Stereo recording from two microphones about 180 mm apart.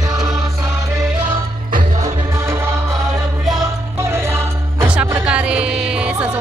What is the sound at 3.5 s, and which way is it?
Music, 15° right (ahead or behind).